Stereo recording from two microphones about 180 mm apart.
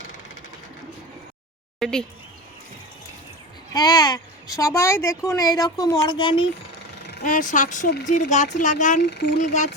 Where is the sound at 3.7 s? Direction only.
20° left (ahead or behind).